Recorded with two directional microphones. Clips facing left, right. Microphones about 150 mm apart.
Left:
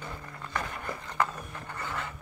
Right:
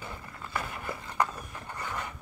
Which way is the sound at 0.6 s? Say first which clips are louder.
Even; 10° right (ahead or behind).